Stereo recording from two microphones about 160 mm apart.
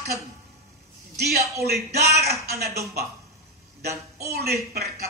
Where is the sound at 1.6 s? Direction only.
85° right.